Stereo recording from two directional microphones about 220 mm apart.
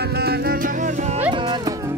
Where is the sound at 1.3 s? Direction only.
20° right (ahead or behind).